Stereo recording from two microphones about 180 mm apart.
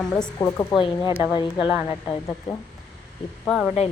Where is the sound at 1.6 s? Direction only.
5° right (ahead or behind).